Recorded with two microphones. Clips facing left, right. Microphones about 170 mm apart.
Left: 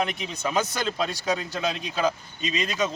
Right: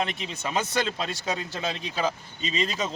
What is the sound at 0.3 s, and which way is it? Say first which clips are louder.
Speech: left 1 dB; 25° right (ahead or behind).